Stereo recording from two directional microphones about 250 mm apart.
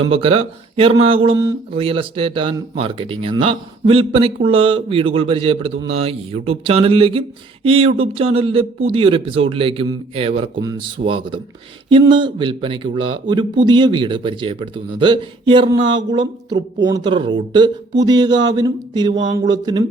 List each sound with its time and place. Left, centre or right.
0.1 s speech: right